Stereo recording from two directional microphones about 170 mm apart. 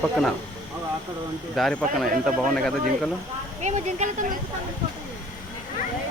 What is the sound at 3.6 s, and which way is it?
Speech, 45° right (ahead or behind).